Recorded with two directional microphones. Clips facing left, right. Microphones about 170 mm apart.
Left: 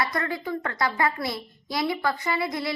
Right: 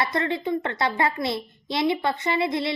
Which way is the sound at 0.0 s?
25° right (ahead or behind).